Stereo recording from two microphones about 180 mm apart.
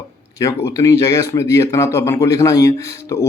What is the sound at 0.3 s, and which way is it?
Speech, 15° left (ahead or behind).